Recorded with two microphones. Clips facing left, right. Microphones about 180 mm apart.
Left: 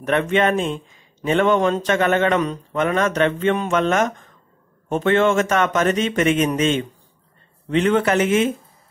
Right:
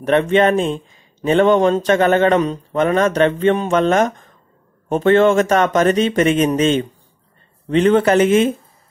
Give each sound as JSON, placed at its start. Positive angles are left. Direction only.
{"t": 0.0, "sound": "speech", "side_deg": -30}